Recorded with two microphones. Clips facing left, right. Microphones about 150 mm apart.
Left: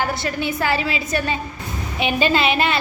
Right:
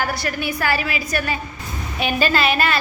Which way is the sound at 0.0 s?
20° left (ahead or behind).